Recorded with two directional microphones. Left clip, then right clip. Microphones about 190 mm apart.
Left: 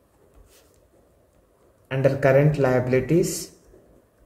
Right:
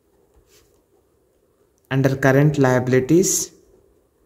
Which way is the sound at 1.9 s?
55° right (ahead or behind).